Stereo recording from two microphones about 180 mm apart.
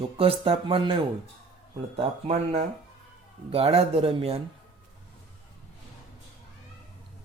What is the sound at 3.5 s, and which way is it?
Speech, 35° right (ahead or behind).